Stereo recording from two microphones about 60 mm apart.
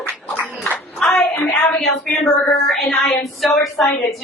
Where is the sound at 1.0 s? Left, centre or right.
Centre.